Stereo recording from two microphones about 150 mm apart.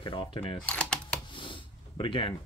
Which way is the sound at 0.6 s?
5° left (ahead or behind).